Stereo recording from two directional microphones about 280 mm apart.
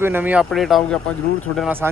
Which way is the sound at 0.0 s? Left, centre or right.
Centre.